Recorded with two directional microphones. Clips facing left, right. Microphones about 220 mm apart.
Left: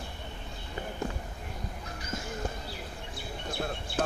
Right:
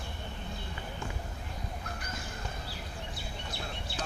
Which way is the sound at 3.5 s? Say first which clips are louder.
Left 9 dB; 55° left (ahead or behind).